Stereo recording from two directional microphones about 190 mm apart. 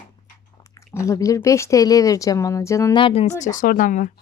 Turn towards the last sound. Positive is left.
turn(degrees=45)  # may be behind; listen again after turning